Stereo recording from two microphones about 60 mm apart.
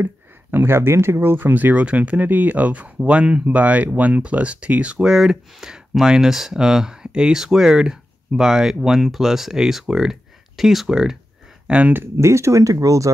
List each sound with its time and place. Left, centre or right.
0.0 s speech: right
5.0 s speech: centre
11.6 s a sound: right
11.9 s speech: right